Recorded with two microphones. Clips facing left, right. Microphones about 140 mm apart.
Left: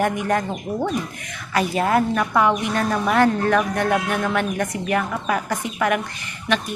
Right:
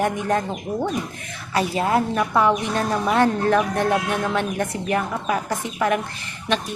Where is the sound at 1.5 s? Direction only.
25° right (ahead or behind).